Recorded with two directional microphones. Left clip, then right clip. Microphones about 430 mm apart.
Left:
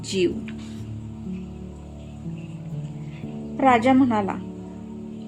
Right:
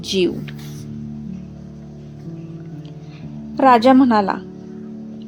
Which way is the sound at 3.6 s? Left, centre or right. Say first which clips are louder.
Right 6 dB; centre.